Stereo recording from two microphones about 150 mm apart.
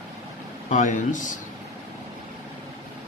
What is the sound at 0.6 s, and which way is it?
Speech, 55° left (ahead or behind).